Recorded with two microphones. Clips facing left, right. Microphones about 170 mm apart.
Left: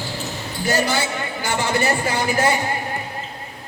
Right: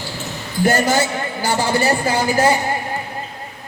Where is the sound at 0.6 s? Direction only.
45° right (ahead or behind).